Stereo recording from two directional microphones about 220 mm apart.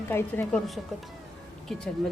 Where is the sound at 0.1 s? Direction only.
10° left (ahead or behind).